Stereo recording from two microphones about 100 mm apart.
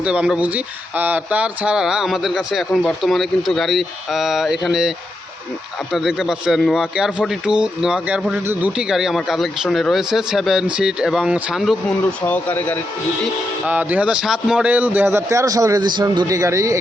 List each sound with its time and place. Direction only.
0.0 s a man's voice: 10° right (ahead or behind)
12.2 s speech: 20° left (ahead or behind)
13.7 s a man's voice: 15° right (ahead or behind); by 15.8 s 35° right (ahead or behind)
15.8 s speech: 45° right (ahead or behind)
16.2 s speech: 30° right (ahead or behind)